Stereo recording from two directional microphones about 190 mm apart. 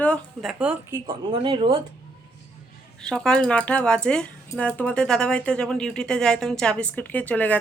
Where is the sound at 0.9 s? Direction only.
25° right (ahead or behind).